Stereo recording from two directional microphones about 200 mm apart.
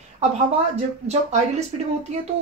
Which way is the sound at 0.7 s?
35° right (ahead or behind).